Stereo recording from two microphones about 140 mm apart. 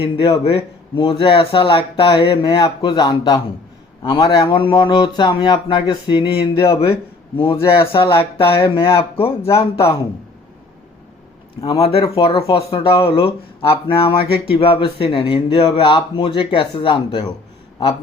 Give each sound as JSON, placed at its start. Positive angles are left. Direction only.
{"t": 0.0, "sound": "speech", "side_deg": 40}
{"t": 11.6, "sound": "speech", "side_deg": 35}
{"t": 12.0, "sound": "speech", "side_deg": 30}
{"t": 12.4, "sound": "speech", "side_deg": 40}